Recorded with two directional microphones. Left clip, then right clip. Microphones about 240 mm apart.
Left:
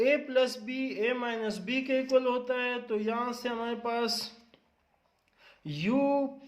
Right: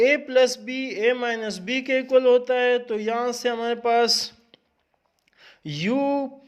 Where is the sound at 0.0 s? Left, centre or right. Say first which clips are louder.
Right 8 dB; right.